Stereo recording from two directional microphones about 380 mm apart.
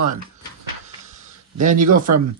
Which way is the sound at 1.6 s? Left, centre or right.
Centre.